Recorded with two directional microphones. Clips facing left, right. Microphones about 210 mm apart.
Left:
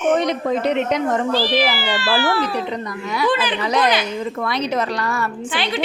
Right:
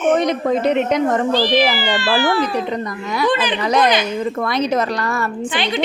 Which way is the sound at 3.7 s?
50° right (ahead or behind).